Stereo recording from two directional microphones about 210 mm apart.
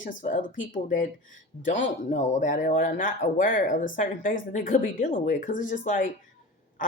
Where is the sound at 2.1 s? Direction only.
35° left (ahead or behind).